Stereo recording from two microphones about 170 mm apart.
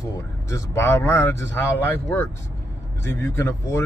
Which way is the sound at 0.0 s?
15° left (ahead or behind).